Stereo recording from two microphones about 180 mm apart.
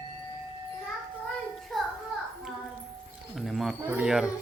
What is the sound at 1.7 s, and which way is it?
Music, centre (ahead or behind).